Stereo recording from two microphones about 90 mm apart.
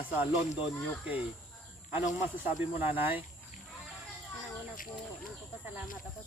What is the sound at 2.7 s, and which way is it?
Speech, 25° right (ahead or behind).